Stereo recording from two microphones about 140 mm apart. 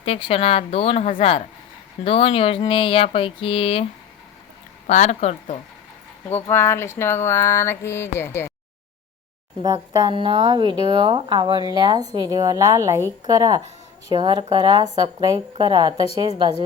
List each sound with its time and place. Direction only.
0.0 s speech: 40° left (ahead or behind)
2.0 s a sound: 40° left (ahead or behind)
4.9 s speech: 55° left (ahead or behind)
6.2 s mantra: 15° left (ahead or behind)
9.6 s speech: 30° right (ahead or behind)